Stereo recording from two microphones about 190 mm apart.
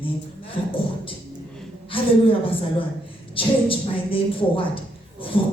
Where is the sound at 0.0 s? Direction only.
30° left (ahead or behind).